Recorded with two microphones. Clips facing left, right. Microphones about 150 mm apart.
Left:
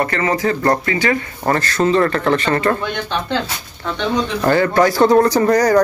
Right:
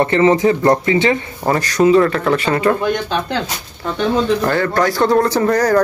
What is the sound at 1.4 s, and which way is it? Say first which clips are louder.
Speech: right 3 dB; 10° right (ahead or behind).